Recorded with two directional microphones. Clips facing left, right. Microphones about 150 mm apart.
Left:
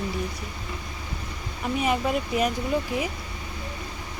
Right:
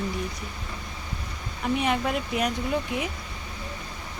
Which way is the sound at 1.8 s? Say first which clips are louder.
Left 1 dB; centre (ahead or behind).